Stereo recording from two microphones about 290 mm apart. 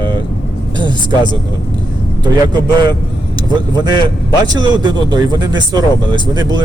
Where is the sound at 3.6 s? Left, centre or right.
Centre.